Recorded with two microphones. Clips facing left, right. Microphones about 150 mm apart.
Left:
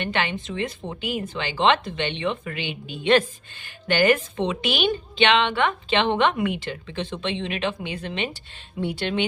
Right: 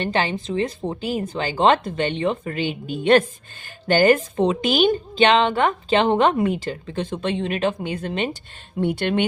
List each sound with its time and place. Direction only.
0.0 s a woman's voice: 35° right (ahead or behind); by 9.2 s 50° right (ahead or behind)